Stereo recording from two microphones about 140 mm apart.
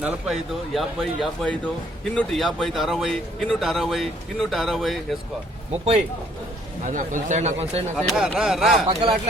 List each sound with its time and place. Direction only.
0.0 s speech: centre (ahead or behind)
6.8 s speech: 65° right (ahead or behind)
7.9 s speech: centre (ahead or behind)
8.9 s speech: 40° right (ahead or behind)